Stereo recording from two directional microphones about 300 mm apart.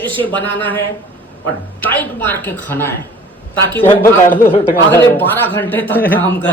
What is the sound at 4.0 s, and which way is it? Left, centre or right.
Speech, left.